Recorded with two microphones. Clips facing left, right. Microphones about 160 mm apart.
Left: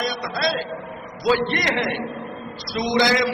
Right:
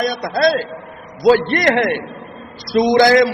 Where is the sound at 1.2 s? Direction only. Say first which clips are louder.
Right 8 dB; 50° right (ahead or behind).